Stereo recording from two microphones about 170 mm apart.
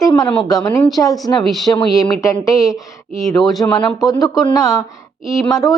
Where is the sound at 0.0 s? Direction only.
20° left (ahead or behind).